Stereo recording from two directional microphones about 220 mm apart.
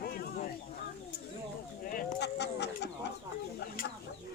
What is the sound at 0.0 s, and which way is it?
Fowl, 45° left (ahead or behind).